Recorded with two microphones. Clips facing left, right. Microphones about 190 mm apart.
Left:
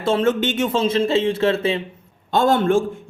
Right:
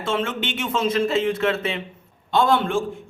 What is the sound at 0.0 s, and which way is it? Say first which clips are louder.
A man's voice: left 7 dB; 40° left (ahead or behind).